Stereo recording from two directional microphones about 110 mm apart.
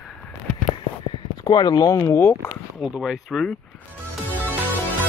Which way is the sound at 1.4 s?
40° left (ahead or behind).